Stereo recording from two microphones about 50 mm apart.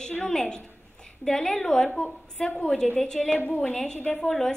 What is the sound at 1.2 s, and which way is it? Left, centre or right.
A woman's voice, centre.